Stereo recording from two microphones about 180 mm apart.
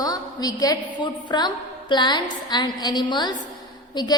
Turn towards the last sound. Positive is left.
turn(degrees=25)  # may be behind; listen again after turning